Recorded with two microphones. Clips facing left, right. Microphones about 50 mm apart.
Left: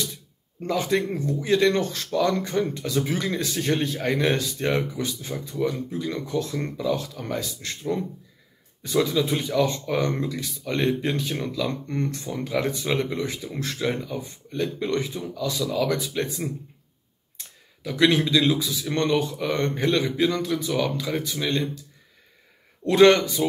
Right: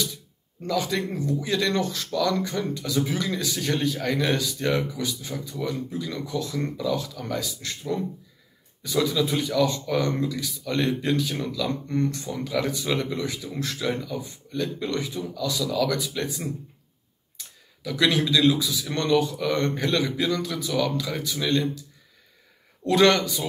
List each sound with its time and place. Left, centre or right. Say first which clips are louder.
0.6 s speech: left 2 dB; left
22.8 s speech: left 3 dB; left